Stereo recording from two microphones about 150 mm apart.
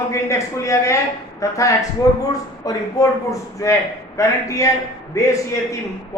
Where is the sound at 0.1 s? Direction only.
20° left (ahead or behind).